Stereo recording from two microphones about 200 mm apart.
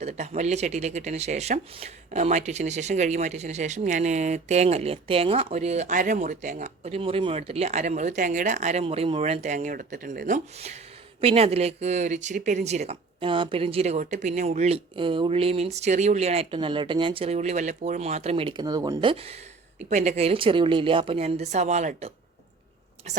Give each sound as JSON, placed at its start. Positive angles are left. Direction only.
{"t": 0.0, "sound": "speech", "side_deg": -35}